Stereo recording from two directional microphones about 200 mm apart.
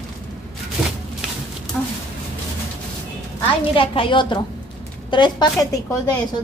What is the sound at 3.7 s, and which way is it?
A woman's voice, 25° left (ahead or behind).